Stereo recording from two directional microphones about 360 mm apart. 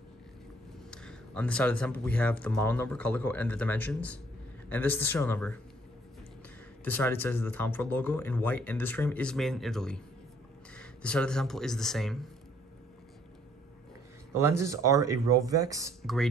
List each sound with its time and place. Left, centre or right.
0.8 s speech: centre
6.8 s speech: centre
14.6 s speech: centre